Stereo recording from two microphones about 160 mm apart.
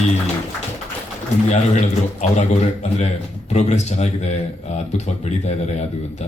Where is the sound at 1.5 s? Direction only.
45° left (ahead or behind).